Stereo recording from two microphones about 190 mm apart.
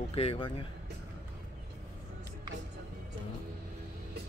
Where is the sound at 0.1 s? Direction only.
30° left (ahead or behind).